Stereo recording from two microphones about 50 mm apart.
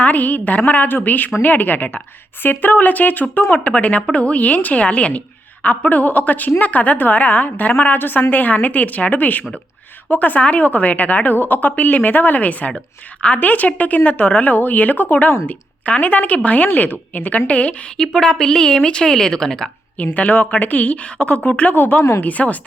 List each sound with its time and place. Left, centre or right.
0.0 s a woman's voice: left
3.6 s a woman's voice: left
17.9 s a woman's voice: centre
20.0 s a woman's voice: left